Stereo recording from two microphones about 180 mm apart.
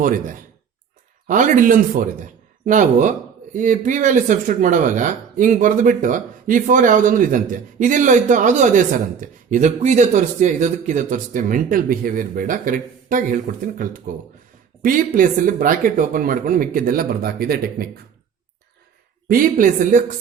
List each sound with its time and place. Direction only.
1.3 s speech: 45° right (ahead or behind)
19.3 s speech: 50° right (ahead or behind)